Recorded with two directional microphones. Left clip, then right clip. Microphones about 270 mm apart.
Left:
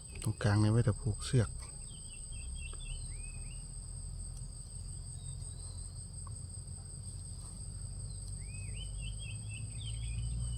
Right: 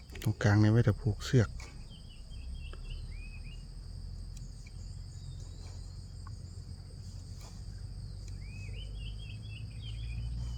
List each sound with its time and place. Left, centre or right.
0.1 s cricket: right